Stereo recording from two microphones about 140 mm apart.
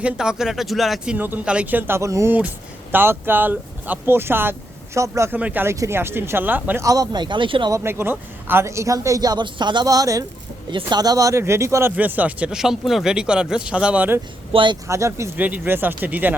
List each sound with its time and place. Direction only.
0.0 s speech: 5° right (ahead or behind)
6.8 s speech: 25° right (ahead or behind)
7.7 s speech: 15° right (ahead or behind)
14.5 s speech: 35° right (ahead or behind)
14.8 s speech: 20° right (ahead or behind)